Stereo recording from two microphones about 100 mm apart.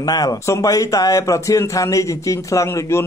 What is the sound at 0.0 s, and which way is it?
A man's voice, 40° left (ahead or behind).